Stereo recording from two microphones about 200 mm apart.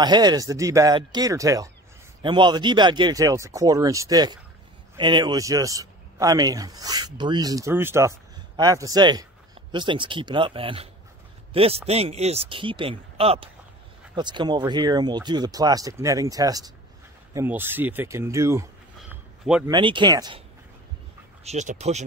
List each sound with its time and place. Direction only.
0.0 s speech: 20° right (ahead or behind)
21.5 s speech: 35° right (ahead or behind)